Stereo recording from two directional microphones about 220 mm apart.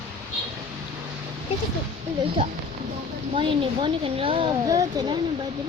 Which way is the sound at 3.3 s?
25° right (ahead or behind).